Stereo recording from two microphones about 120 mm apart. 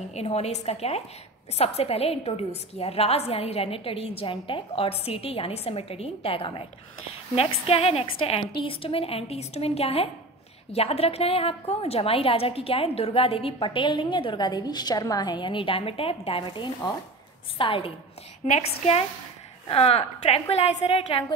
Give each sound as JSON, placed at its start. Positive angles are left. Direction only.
{"t": 0.1, "sound": "a woman's voice", "side_deg": 60}
{"t": 18.4, "sound": "a woman's voice", "side_deg": 60}